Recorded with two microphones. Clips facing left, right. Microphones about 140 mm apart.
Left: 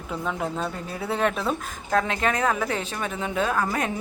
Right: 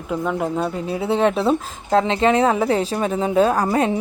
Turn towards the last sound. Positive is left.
turn(degrees=-30)  # may be behind; listen again after turning